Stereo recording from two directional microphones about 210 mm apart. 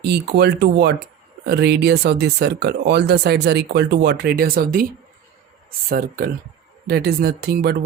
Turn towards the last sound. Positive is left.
turn(degrees=-50)  # may be behind; listen again after turning